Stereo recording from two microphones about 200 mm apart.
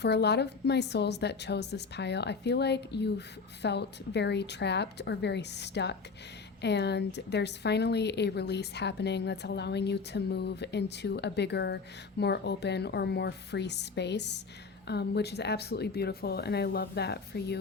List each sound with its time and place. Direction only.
0.0 s speech: 55° left (ahead or behind)